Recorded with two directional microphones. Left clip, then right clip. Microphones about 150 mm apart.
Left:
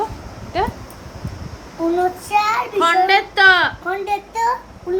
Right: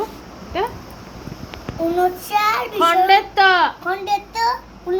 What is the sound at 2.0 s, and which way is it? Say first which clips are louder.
A child's voice: even; 10° right (ahead or behind).